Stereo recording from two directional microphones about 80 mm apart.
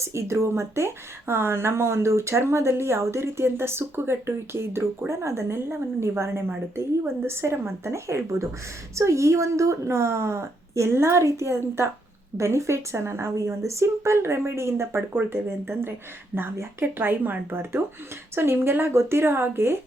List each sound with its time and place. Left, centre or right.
0.0 s speech: right